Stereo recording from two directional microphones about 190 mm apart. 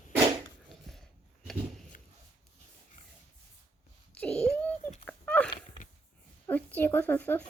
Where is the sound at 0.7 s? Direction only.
Centre (ahead or behind).